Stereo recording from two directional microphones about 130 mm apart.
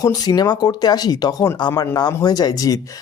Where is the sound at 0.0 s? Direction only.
30° left (ahead or behind).